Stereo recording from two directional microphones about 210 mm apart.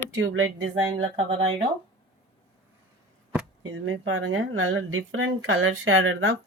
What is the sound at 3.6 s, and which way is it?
Speech, 80° right.